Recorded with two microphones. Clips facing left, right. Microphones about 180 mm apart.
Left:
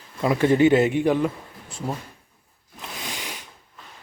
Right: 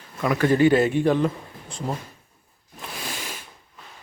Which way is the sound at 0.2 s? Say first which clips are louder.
Left 1 dB; 25° left (ahead or behind).